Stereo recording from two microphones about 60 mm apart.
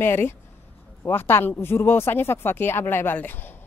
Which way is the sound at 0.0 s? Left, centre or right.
Left.